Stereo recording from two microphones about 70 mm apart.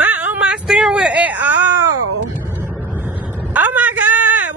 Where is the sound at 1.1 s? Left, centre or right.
Right.